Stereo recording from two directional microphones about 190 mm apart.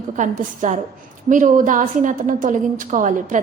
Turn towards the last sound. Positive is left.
turn(degrees=-40)  # may be behind; listen again after turning